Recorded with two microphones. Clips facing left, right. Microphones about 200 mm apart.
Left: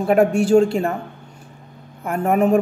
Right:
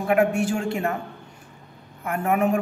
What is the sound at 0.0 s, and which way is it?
Speech, 35° left (ahead or behind).